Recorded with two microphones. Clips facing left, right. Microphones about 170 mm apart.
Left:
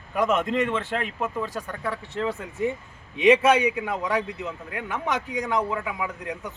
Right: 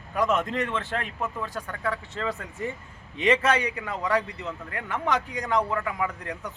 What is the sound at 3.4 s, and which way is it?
A man's voice, 5° left (ahead or behind).